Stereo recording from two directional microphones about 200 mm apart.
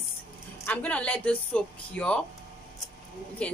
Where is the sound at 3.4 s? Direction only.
5° left (ahead or behind).